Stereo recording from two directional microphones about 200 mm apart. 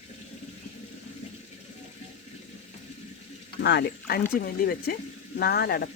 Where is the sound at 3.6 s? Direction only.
60° left (ahead or behind).